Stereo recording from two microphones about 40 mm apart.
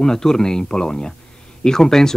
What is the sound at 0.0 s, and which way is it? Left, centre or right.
Speech, centre.